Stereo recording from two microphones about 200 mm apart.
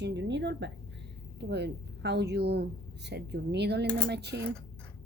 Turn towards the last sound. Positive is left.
turn(degrees=-55)  # may be behind; listen again after turning